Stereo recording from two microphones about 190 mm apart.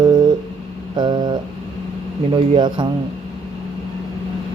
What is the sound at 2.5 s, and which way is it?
Speech, 25° right (ahead or behind).